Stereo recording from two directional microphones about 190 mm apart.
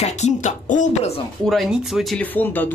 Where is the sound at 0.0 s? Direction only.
35° left (ahead or behind).